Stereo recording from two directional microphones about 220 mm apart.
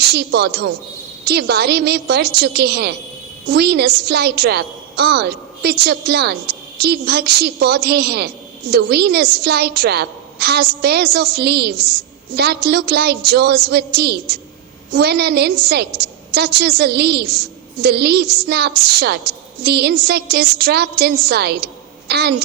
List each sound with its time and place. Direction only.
0.1 s a woman's voice: 50° right (ahead or behind)